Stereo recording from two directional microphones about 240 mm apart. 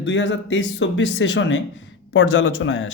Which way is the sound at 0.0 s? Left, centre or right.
Left.